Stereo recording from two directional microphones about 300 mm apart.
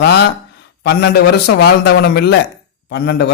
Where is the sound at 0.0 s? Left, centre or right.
Left.